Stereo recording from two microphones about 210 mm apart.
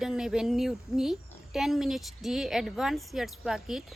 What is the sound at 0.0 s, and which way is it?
A woman's voice, centre (ahead or behind).